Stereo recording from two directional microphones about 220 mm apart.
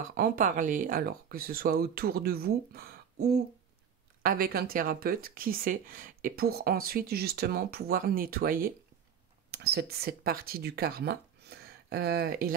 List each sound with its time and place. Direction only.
0.0 s speech: 40° right (ahead or behind)